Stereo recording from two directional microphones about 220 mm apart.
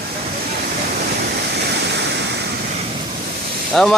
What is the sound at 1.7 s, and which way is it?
Waterfall, 50° right (ahead or behind).